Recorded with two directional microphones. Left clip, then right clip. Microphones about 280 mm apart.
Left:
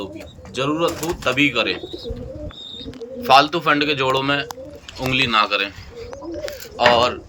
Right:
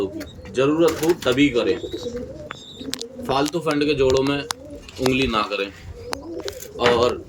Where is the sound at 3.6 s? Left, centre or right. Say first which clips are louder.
Left 2 dB; centre.